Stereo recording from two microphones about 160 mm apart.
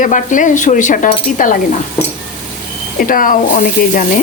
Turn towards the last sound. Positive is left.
turn(degrees=55)  # may be behind; listen again after turning